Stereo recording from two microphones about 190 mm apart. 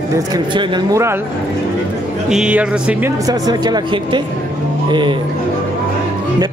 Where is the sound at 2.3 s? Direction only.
5° right (ahead or behind).